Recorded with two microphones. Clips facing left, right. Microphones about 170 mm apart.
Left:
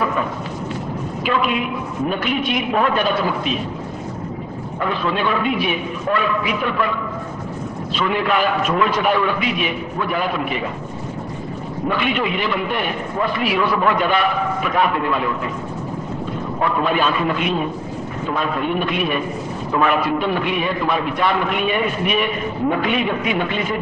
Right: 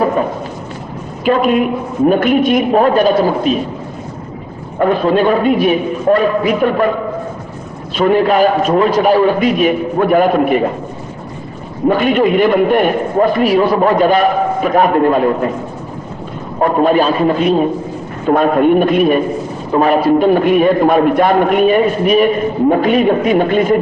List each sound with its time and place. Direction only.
0.0 s a sound: 40° right (ahead or behind)
1.2 s a man's voice: 45° right (ahead or behind)
4.8 s a man's voice: 45° right (ahead or behind)
11.9 s a man's voice: 40° right (ahead or behind)
16.6 s a man's voice: 45° right (ahead or behind)
18.3 s a man's voice: 50° right (ahead or behind)